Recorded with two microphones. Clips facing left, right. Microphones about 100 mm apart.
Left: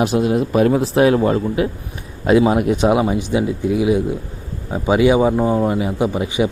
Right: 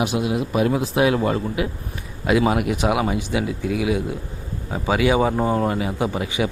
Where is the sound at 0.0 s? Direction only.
40° left (ahead or behind).